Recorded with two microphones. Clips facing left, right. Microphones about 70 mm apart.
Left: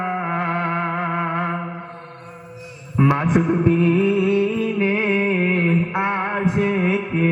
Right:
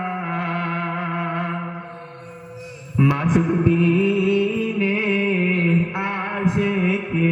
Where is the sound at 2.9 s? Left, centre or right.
Left.